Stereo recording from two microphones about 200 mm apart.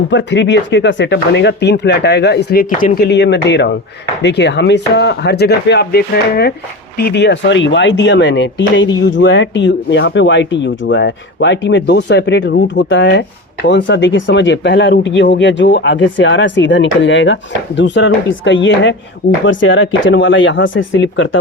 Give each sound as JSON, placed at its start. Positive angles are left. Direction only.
{"t": 0.1, "sound": "speech", "side_deg": 65}